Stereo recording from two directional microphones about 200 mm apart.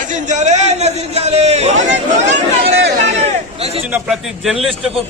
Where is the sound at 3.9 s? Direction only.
Centre (ahead or behind).